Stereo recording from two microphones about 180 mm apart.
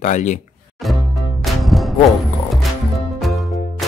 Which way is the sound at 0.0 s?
40° left (ahead or behind).